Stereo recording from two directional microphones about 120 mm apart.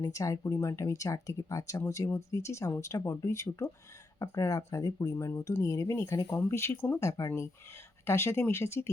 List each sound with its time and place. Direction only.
0.0 s speech: 30° left (ahead or behind)